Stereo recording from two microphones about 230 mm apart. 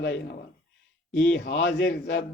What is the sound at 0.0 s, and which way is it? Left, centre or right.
Speech, left.